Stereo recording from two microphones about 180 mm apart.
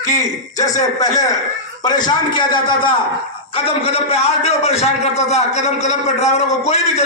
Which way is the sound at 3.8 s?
35° left (ahead or behind).